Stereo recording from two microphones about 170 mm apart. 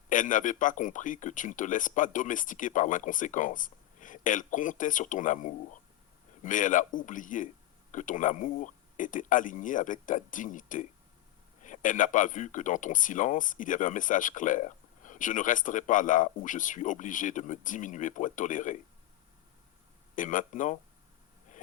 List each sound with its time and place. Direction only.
0.1 s speech: 50° left (ahead or behind)
20.1 s speech: 50° left (ahead or behind)